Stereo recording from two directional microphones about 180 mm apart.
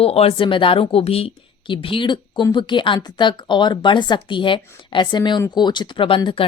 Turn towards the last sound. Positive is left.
turn(degrees=30)  # may be behind; listen again after turning